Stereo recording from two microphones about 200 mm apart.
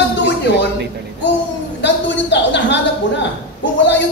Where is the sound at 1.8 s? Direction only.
60° left (ahead or behind).